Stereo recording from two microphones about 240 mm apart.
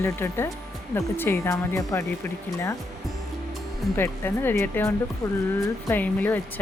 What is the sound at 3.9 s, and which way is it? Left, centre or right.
Speech, centre.